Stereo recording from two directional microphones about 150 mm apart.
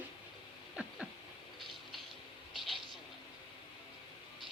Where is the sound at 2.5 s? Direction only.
Centre (ahead or behind).